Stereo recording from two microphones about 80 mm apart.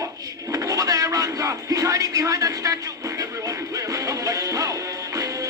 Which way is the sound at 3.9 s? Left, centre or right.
Right.